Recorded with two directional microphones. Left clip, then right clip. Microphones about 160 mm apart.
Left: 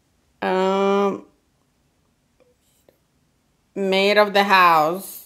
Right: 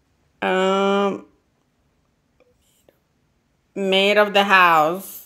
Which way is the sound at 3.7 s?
Centre (ahead or behind).